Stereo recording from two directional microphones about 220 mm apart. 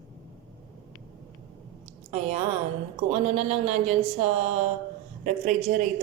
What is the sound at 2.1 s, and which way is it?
Speech, 30° right (ahead or behind).